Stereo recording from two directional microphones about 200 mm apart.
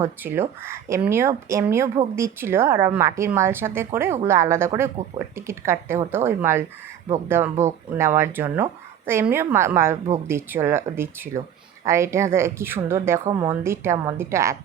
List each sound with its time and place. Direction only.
0.0 s speech: 10° right (ahead or behind)